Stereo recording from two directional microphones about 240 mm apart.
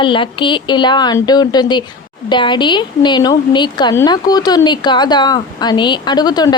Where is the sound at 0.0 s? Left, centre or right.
Centre.